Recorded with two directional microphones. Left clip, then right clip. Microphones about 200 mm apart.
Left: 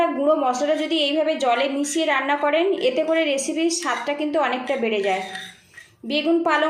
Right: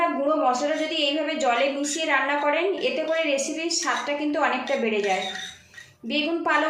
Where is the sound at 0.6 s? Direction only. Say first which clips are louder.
Left 3 dB; 35° left (ahead or behind).